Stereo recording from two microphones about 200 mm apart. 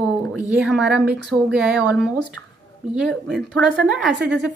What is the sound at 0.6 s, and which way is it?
A woman's voice, 5° right (ahead or behind).